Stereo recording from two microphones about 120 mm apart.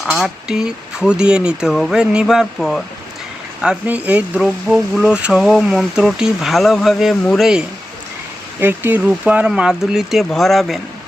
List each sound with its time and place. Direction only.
0.0 s speech: centre (ahead or behind)
8.6 s speech: 15° right (ahead or behind); by 10.8 s centre (ahead or behind)